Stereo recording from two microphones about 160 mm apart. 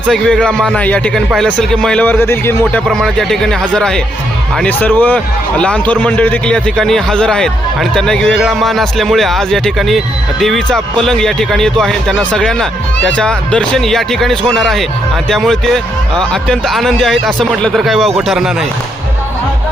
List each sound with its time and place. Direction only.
0.1 s a man's voice: 5° left (ahead or behind)
2.8 s a man's voice: centre (ahead or behind)